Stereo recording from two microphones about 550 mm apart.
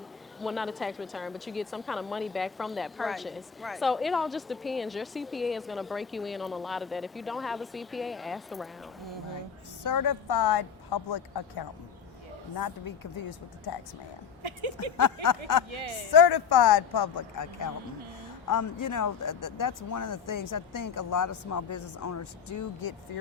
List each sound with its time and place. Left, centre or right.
0.3 s a woman's voice: centre
9.8 s a woman's voice: left
12.5 s speech: left
14.4 s a woman's voice: right
14.9 s speech: left
15.7 s a man's voice: right
16.1 s speech: left